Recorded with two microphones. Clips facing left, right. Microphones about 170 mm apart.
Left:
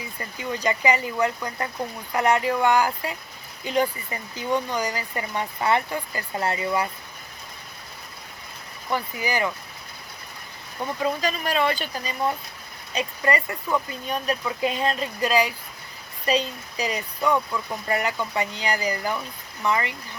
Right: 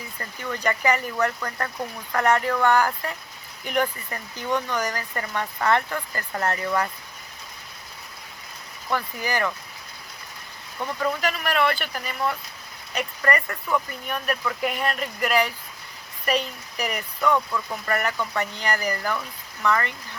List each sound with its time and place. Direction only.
0.2 s speech: 15° left (ahead or behind)
8.9 s speech: 15° left (ahead or behind)
11.0 s speech: 15° left (ahead or behind)